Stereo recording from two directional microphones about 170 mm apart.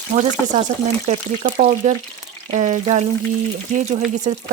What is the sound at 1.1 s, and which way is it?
A woman's voice, 45° right (ahead or behind).